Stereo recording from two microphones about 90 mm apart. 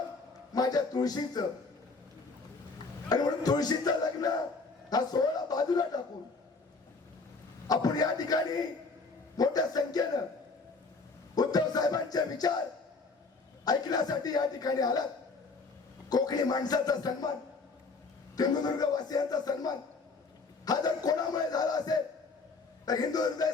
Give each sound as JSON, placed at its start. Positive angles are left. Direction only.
{"t": 0.5, "sound": "a man's voice", "side_deg": 45}
{"t": 3.1, "sound": "a man's voice", "side_deg": 45}
{"t": 7.7, "sound": "a man's voice", "side_deg": 45}
{"t": 11.3, "sound": "a man's voice", "side_deg": 45}
{"t": 13.7, "sound": "a man's voice", "side_deg": 50}
{"t": 16.0, "sound": "a man's voice", "side_deg": 45}
{"t": 18.3, "sound": "a man's voice", "side_deg": 50}